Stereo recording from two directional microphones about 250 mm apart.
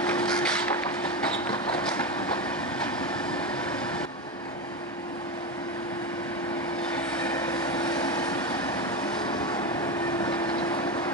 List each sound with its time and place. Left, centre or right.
0.0 s wood: centre
7.3 s vehicle: centre